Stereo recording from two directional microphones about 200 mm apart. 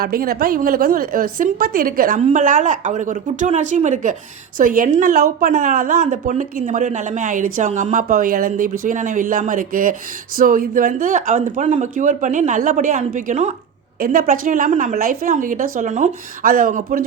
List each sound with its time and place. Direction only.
0.0 s a woman's voice: 50° right (ahead or behind)